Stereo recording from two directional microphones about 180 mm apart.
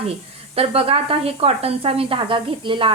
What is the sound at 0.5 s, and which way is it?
A woman's voice, 35° right (ahead or behind).